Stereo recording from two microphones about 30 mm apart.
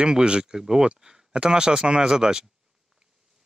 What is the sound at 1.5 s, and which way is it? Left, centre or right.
Speech, right.